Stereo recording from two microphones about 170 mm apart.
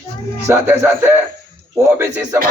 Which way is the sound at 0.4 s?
15° right (ahead or behind).